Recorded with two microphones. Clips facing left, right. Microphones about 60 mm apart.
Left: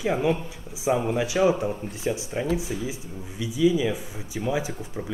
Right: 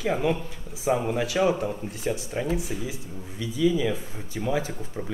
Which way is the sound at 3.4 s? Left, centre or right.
Centre.